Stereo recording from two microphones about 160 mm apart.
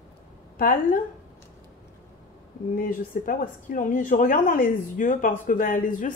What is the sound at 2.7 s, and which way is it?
A woman's voice, 60° left (ahead or behind).